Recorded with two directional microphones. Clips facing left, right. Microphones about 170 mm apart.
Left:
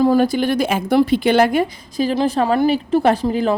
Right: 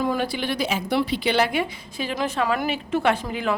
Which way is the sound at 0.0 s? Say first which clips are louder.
Left 10 dB; 40° left (ahead or behind).